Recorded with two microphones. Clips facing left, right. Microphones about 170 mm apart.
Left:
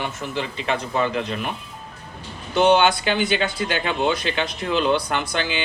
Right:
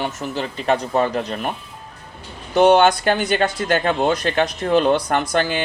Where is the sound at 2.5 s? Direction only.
45° right (ahead or behind).